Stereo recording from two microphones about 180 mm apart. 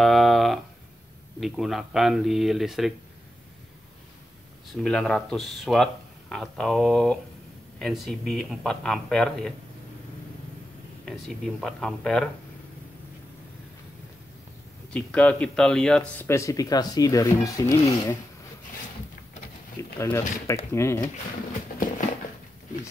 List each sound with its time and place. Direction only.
0.0 s a sound: centre (ahead or behind)
1.4 s speech: centre (ahead or behind)
4.8 s speech: 5° left (ahead or behind)
11.1 s speech: centre (ahead or behind)
14.9 s speech: 5° left (ahead or behind)
17.7 s speech: 30° left (ahead or behind)
19.8 s speech: 15° left (ahead or behind)
21.7 s a sound: 50° left (ahead or behind)